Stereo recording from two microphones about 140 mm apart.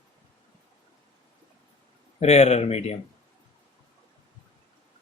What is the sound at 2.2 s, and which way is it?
Speech, 50° left (ahead or behind).